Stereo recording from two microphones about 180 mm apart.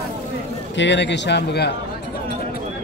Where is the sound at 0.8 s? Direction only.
80° left.